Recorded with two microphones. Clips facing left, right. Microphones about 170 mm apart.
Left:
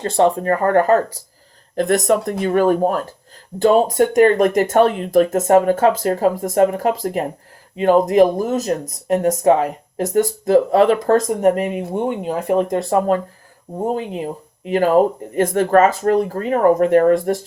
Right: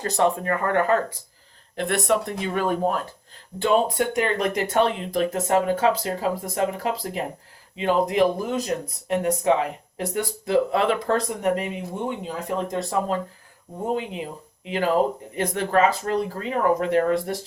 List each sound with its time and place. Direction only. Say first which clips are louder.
0.0 s speech: left 6 dB; 30° left (ahead or behind); by 13.1 s 55° left (ahead or behind)
13.8 s speech: left 5 dB; 40° left (ahead or behind)